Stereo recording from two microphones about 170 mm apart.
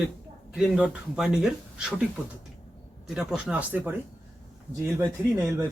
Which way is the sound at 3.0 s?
Centre (ahead or behind).